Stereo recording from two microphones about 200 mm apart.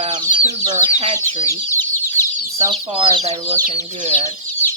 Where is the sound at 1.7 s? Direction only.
10° left (ahead or behind).